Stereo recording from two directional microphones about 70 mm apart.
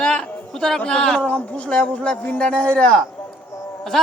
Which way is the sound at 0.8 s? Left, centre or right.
Centre.